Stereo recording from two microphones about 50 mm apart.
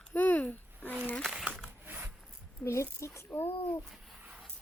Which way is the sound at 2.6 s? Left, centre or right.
Left.